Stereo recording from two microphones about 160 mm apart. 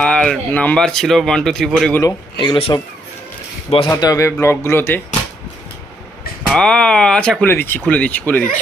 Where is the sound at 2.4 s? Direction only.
35° left (ahead or behind).